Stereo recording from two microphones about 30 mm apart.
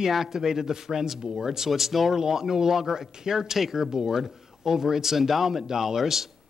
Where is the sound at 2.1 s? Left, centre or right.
Centre.